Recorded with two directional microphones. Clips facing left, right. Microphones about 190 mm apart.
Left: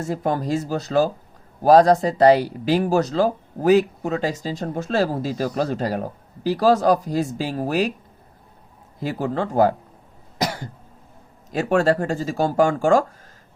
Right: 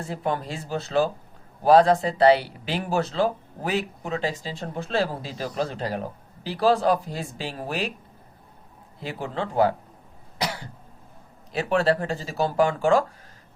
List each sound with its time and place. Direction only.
0.0 s speech: 40° left (ahead or behind)
9.0 s speech: 45° left (ahead or behind)
10.3 s cough: 45° left (ahead or behind)
11.5 s speech: 45° left (ahead or behind)